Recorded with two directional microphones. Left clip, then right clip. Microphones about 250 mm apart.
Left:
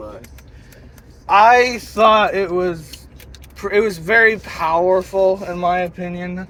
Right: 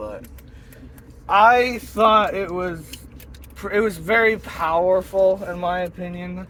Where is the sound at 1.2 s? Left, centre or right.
Centre.